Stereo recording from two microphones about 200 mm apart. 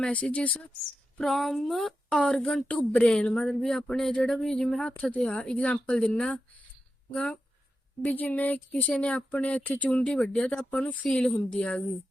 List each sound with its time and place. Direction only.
0.0 s speech: 5° left (ahead or behind)